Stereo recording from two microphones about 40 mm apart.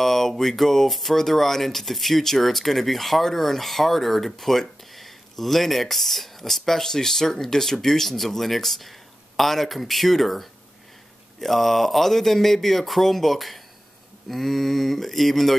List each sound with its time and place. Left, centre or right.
0.0 s speech: centre